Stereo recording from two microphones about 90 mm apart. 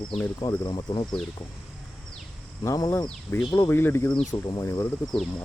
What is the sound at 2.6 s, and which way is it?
Speech, 35° left (ahead or behind).